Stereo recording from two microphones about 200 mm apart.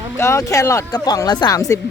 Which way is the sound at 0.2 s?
15° left (ahead or behind).